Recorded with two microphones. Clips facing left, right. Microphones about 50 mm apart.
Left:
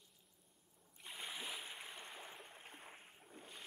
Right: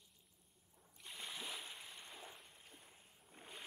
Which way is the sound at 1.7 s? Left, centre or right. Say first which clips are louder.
Left 3 dB; left.